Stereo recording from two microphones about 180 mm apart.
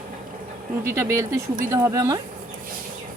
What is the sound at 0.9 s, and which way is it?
Speech, 15° right (ahead or behind).